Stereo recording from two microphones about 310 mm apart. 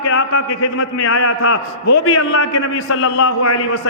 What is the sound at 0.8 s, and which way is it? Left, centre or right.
A man's voice, left.